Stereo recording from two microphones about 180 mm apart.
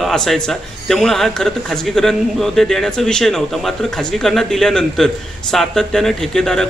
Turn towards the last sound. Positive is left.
turn(degrees=5)  # may be behind; listen again after turning